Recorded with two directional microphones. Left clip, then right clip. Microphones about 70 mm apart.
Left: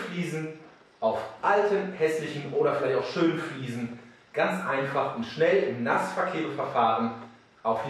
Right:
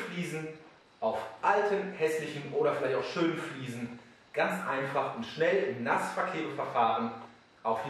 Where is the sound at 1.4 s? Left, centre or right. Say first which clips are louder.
Left 4 dB; centre.